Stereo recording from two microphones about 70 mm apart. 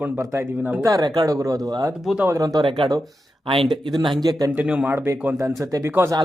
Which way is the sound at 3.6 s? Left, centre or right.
Right.